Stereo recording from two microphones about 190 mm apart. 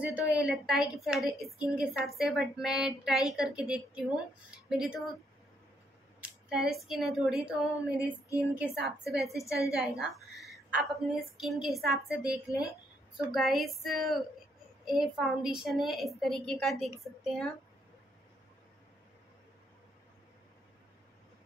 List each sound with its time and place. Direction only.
0.0 s a woman's voice: 5° right (ahead or behind)
6.5 s a woman's voice: centre (ahead or behind)
8.1 s a woman's voice: 15° left (ahead or behind)
8.5 s a woman's voice: centre (ahead or behind)
9.3 s a woman's voice: 15° left (ahead or behind)
9.8 s a woman's voice: centre (ahead or behind)